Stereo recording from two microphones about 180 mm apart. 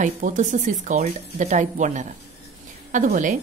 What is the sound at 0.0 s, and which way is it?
A woman's voice, 45° right (ahead or behind).